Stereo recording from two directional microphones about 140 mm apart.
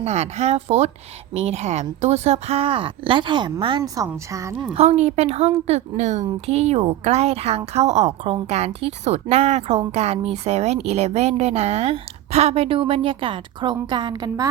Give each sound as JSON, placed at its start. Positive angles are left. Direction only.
{"t": 0.0, "sound": "speech", "side_deg": -55}
{"t": 3.9, "sound": "a woman's voice", "side_deg": -25}
{"t": 4.7, "sound": "speech", "side_deg": -50}